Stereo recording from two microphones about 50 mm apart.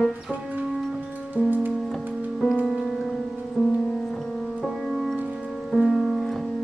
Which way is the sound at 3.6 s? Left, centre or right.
Left.